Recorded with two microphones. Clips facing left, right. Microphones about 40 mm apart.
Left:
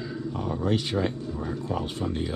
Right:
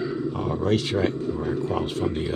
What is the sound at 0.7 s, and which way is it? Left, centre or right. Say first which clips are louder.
Speech: right 3 dB; right.